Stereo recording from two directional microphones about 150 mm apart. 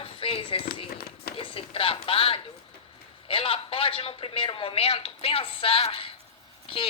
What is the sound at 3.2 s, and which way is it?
A man's voice, 35° left (ahead or behind).